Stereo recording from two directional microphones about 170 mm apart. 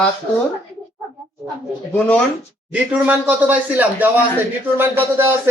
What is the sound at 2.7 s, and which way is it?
Speech, 10° right (ahead or behind).